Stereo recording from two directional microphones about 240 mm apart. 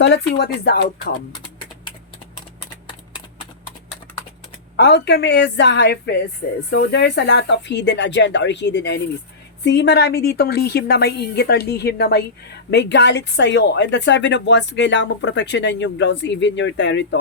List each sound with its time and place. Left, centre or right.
0.0 s a woman's voice: left
4.8 s a woman's voice: left